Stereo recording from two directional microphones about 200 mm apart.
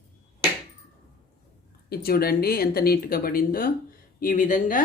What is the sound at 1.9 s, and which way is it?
Speech, 50° left (ahead or behind).